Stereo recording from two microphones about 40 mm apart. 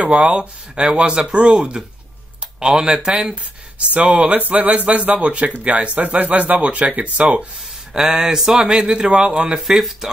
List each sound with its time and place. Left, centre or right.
0.0 s speech: right
3.8 s speech: right
7.9 s speech: centre
9.6 s speech: centre